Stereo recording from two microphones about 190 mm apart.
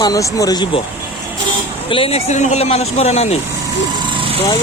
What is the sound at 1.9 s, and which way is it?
Speech, 30° left (ahead or behind).